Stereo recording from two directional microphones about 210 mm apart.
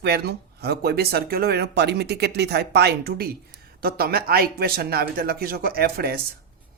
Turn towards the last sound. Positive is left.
turn(degrees=-45)  # may be behind; listen again after turning